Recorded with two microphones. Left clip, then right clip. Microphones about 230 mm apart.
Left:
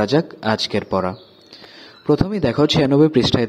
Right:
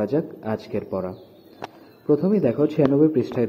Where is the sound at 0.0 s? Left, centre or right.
Left.